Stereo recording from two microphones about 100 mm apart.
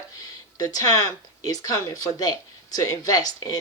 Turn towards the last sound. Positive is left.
turn(degrees=40)  # may be behind; listen again after turning